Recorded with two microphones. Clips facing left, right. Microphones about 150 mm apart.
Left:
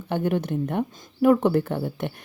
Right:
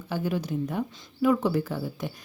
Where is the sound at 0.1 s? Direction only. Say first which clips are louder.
Left 4 dB; 60° left (ahead or behind).